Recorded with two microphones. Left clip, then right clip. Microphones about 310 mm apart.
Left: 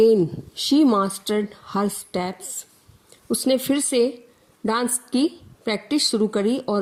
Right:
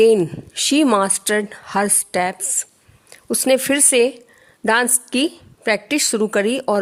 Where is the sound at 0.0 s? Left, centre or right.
Right.